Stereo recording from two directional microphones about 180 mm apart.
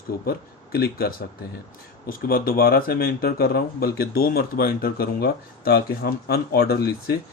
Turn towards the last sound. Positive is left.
turn(degrees=60)  # may be behind; listen again after turning